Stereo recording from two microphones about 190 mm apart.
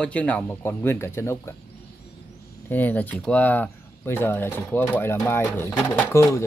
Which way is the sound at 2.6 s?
10° left (ahead or behind).